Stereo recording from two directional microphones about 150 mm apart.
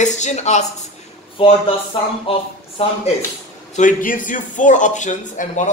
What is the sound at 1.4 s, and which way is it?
Speech, 40° left (ahead or behind).